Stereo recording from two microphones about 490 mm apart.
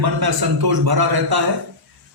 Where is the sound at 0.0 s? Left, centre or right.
Right.